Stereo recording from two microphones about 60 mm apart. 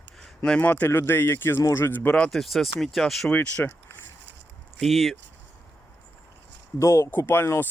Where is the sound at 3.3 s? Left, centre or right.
Left.